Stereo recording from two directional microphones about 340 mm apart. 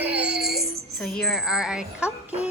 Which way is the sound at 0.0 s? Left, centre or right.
Centre.